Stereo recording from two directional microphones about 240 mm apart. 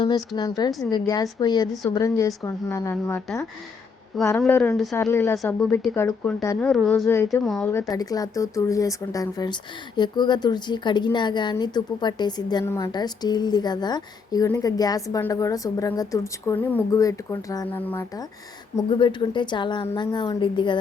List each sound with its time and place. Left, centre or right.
0.3 s speech: centre
18.8 s a woman's voice: left